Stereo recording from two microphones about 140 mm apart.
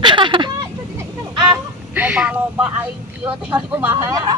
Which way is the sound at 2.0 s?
10° right (ahead or behind).